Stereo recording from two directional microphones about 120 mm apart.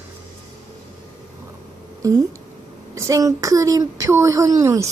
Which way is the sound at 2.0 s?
30° right (ahead or behind).